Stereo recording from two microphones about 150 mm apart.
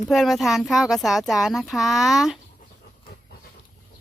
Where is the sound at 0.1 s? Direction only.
Centre (ahead or behind).